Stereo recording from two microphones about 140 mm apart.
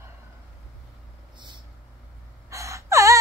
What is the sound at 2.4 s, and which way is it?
Gasp, 20° right (ahead or behind).